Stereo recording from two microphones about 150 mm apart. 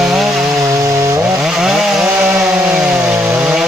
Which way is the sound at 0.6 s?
20° right (ahead or behind).